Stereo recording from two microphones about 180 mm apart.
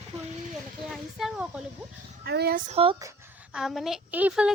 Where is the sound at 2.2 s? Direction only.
60° right (ahead or behind).